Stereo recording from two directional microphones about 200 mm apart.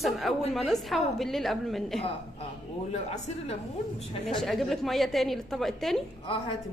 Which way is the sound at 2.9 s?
30° left (ahead or behind).